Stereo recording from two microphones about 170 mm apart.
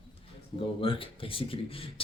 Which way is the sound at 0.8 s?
30° left (ahead or behind).